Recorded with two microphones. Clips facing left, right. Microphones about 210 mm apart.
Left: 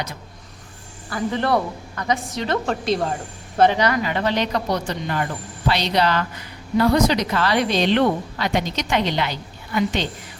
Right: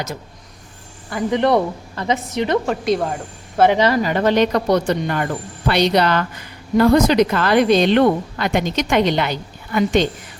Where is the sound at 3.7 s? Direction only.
25° right (ahead or behind).